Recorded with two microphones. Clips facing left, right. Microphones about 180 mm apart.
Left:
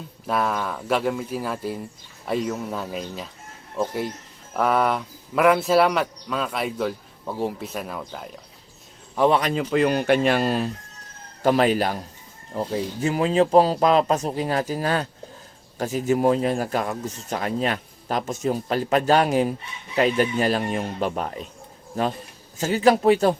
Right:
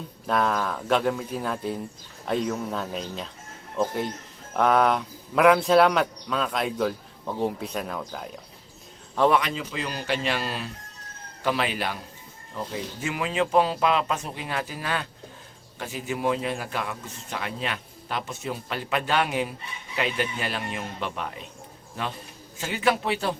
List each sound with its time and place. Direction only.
0.3 s speech: 5° left (ahead or behind)
9.5 s speech: 55° left (ahead or behind)